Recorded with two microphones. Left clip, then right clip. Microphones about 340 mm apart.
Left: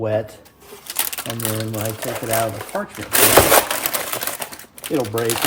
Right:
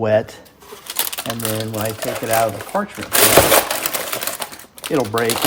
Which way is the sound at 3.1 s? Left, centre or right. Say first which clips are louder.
Right 1 dB; centre.